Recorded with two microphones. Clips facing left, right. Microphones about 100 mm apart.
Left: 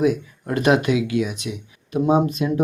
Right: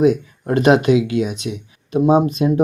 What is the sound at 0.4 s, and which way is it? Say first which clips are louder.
Speech: right 5 dB; 25° right (ahead or behind).